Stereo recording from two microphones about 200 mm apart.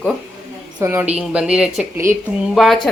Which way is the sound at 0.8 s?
10° right (ahead or behind).